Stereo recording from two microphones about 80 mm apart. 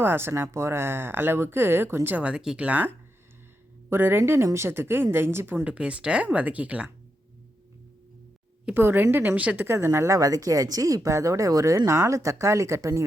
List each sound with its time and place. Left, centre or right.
0.0 s speech: right
3.8 s speech: right
5.6 s speech: centre
8.7 s speech: right
9.6 s speech: right